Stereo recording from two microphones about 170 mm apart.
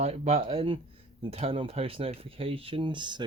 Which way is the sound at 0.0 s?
35° right (ahead or behind).